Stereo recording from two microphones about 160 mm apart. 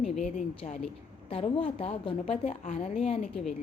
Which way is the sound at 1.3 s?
35° left (ahead or behind).